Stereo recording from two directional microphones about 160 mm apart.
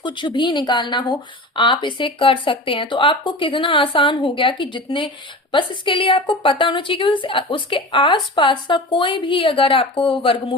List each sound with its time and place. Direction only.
0.0 s a woman's voice: 30° left (ahead or behind)